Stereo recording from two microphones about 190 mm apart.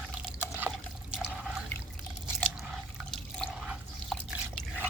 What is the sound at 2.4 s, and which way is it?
Drip, centre (ahead or behind).